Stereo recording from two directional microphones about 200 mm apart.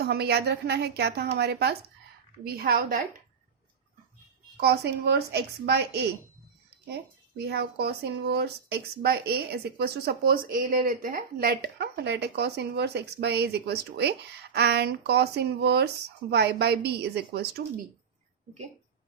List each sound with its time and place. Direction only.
0.0 s a woman's voice: 55° right (ahead or behind)
4.6 s a woman's voice: 55° right (ahead or behind)
7.3 s a woman's voice: 55° right (ahead or behind)